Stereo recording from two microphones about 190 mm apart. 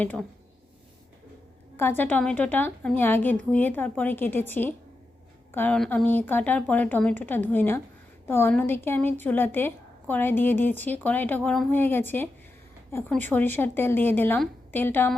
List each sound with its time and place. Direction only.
0.0 s a woman's voice: 10° left (ahead or behind)
1.7 s a woman's voice: 10° left (ahead or behind)